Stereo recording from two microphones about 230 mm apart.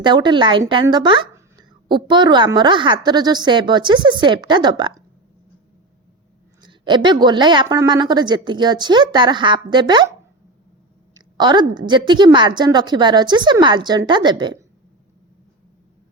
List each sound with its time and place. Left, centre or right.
0.0 s a woman's voice: centre
6.6 s a woman's voice: centre
11.3 s a woman's voice: centre